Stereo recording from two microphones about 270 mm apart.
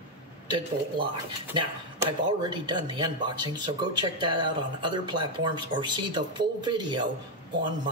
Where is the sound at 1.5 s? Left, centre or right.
Centre.